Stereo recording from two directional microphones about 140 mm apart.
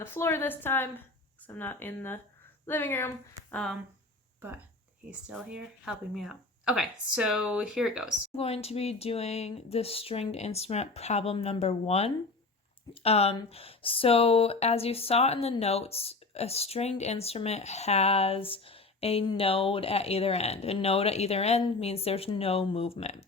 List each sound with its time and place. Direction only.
0.0 s a woman's voice: 15° left (ahead or behind)
3.5 s speech: 5° left (ahead or behind)
4.4 s speech: 15° right (ahead or behind)
8.4 s speech: 45° left (ahead or behind)